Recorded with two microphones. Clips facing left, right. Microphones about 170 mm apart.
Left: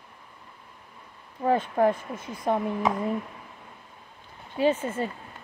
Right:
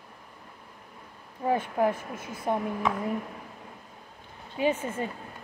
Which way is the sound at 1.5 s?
10° right (ahead or behind).